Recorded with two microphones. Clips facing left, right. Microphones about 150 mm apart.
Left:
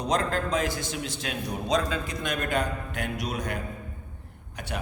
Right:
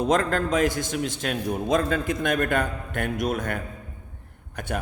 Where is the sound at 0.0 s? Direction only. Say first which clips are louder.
Right 4 dB; 50° right (ahead or behind).